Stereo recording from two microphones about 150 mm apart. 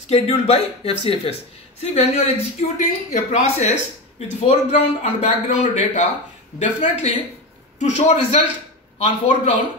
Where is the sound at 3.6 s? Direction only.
45° left (ahead or behind).